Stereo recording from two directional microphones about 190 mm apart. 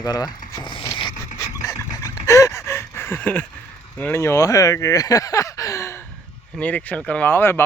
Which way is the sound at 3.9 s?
10° left (ahead or behind).